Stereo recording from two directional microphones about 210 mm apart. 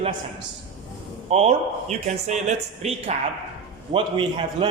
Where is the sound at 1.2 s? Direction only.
30° right (ahead or behind).